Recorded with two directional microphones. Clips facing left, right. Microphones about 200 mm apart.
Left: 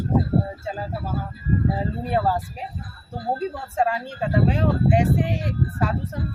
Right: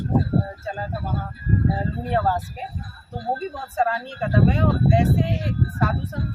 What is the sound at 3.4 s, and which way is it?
Speech, 15° left (ahead or behind).